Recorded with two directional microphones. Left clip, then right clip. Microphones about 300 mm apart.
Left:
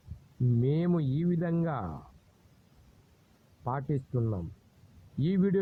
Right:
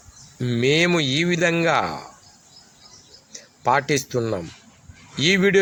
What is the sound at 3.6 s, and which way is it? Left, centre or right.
A man's voice, left.